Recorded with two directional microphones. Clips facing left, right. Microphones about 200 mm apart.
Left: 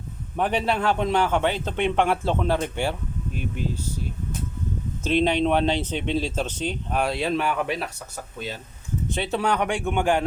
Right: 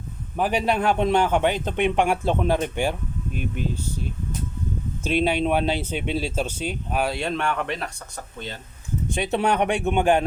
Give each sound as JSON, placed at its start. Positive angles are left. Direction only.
{"t": 0.3, "sound": "a man's voice", "side_deg": -5}
{"t": 0.6, "sound": "speech", "side_deg": -15}
{"t": 5.0, "sound": "speech", "side_deg": -10}
{"t": 9.0, "sound": "speech", "side_deg": -15}